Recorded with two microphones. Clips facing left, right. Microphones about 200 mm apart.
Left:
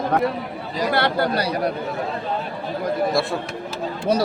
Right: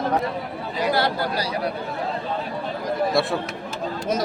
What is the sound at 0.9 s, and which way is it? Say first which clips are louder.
Speech: left 3 dB; 60° left (ahead or behind).